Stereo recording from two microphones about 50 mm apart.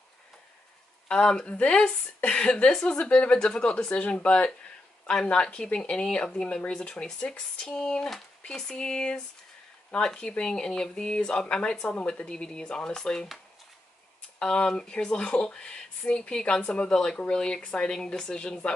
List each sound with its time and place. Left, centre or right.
1.0 s speech: centre
14.4 s speech: centre